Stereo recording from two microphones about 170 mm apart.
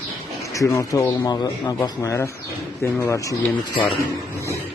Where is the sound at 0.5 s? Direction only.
20° left (ahead or behind).